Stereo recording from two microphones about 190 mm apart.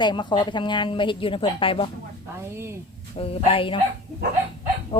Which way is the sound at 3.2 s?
30° left (ahead or behind).